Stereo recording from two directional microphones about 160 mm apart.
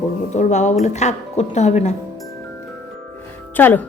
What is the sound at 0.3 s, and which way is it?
Speech, 45° left (ahead or behind).